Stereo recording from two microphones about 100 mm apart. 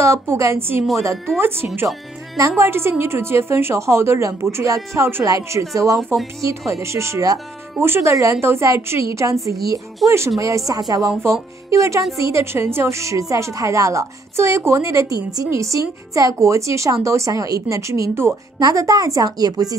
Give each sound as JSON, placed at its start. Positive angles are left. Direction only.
{"t": 0.0, "sound": "a woman's voice", "side_deg": -30}
{"t": 1.1, "sound": "speech", "side_deg": 5}
{"t": 1.4, "sound": "a woman's voice", "side_deg": -25}